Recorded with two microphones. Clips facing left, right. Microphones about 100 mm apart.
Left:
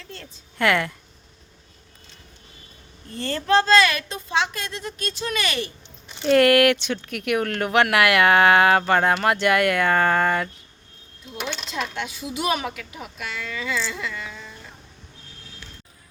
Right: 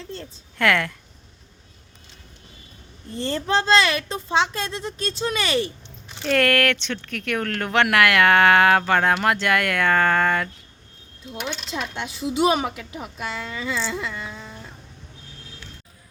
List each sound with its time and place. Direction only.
0.6 s speech: centre (ahead or behind)
3.2 s a woman's voice: 20° right (ahead or behind)
6.2 s speech: 5° left (ahead or behind)
11.7 s a woman's voice: 25° right (ahead or behind)